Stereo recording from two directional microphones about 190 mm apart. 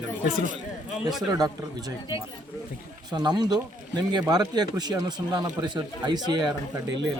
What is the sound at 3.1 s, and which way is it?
Speech, 20° right (ahead or behind).